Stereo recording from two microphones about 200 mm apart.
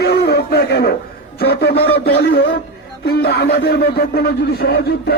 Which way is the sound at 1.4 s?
55° left (ahead or behind).